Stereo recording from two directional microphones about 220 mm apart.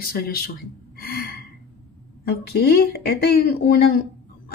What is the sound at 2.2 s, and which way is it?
Speech, 45° left (ahead or behind).